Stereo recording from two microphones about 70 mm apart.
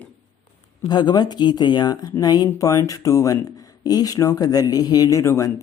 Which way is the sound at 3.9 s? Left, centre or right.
Left.